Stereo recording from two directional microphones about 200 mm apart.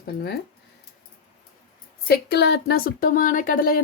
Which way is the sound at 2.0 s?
55° left (ahead or behind).